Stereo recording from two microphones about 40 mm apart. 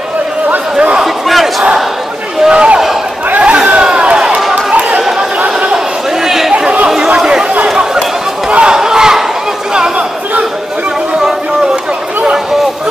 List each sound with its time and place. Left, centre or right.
1.0 s battle cry: centre
2.5 s a sound: right
4.6 s chatter: right
6.2 s a sound: centre
7.2 s chatter: centre
8.5 s battle cry: right
8.7 s battle cry: centre